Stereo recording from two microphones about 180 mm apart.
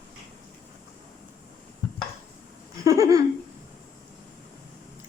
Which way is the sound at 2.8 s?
20° right (ahead or behind).